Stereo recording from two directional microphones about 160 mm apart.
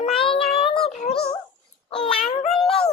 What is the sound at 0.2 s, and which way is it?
Child singing, 35° left (ahead or behind).